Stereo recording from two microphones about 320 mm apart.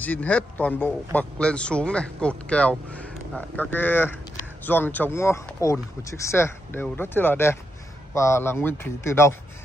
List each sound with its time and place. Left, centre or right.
0.0 s a man's voice: centre